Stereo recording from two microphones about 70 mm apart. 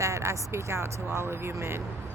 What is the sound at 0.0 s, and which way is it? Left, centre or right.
Speech, right.